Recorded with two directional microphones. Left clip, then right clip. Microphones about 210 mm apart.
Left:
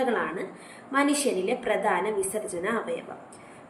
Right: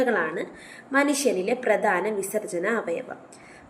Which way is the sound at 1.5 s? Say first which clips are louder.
Right 4 dB; 50° right (ahead or behind).